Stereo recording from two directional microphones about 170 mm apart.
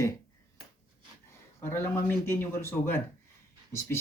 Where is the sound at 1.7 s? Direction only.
10° left (ahead or behind).